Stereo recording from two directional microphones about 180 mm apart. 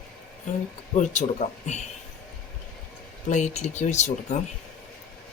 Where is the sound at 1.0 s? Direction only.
40° left (ahead or behind).